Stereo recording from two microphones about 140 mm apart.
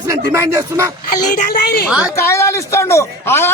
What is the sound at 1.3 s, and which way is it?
Speech, 75° left (ahead or behind).